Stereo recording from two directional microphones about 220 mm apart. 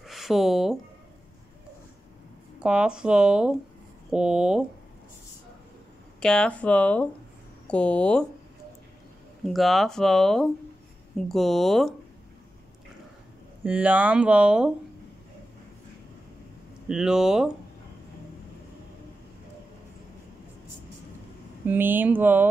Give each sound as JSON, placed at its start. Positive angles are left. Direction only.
{"t": 0.0, "sound": "a sound", "side_deg": 0}
{"t": 2.6, "sound": "speech", "side_deg": -5}
{"t": 6.2, "sound": "speech", "side_deg": 5}
{"t": 9.4, "sound": "speech", "side_deg": 0}
{"t": 13.7, "sound": "speech", "side_deg": -5}
{"t": 16.8, "sound": "speech", "side_deg": -5}
{"t": 21.6, "sound": "speech", "side_deg": -10}